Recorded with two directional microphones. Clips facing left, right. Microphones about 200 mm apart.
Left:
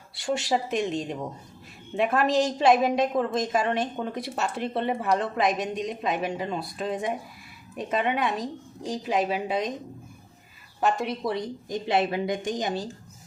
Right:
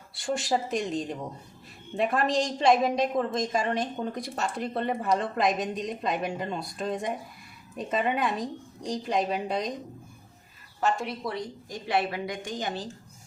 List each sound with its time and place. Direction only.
0.2 s a woman's voice: centre (ahead or behind)
10.8 s speech: 15° left (ahead or behind)